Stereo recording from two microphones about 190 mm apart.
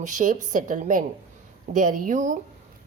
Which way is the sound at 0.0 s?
40° right (ahead or behind).